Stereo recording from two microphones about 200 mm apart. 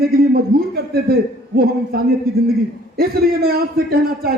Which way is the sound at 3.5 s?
50° right (ahead or behind).